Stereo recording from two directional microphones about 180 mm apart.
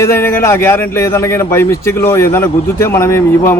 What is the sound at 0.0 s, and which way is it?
A man's voice, 15° left (ahead or behind).